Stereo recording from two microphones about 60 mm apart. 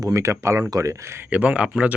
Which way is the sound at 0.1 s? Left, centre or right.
Right.